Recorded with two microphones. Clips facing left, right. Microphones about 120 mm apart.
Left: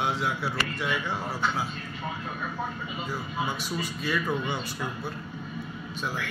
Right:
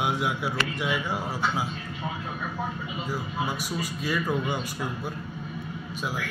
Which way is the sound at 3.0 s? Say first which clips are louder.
Right 1 dB; 10° right (ahead or behind).